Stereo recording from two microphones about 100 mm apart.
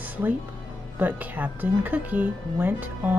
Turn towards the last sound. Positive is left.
turn(degrees=-20)  # may be behind; listen again after turning